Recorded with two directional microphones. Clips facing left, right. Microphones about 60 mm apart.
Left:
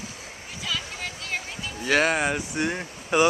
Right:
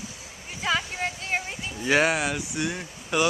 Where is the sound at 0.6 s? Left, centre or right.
Right.